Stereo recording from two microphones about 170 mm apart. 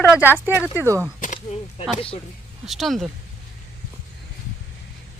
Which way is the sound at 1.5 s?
45° left (ahead or behind).